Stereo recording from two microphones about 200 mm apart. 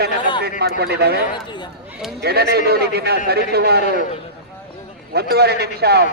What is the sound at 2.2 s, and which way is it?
A man's voice, 55° right (ahead or behind).